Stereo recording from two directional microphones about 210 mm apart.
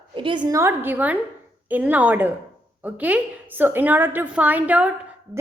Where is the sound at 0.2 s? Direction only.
25° right (ahead or behind).